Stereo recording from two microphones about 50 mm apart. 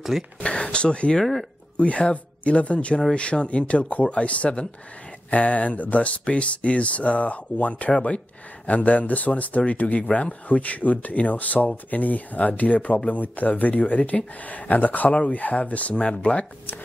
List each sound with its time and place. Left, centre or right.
0.4 s speech: left
1.2 s speech: centre
1.8 s speech: left